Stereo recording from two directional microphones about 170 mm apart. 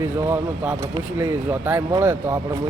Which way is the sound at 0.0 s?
15° right (ahead or behind).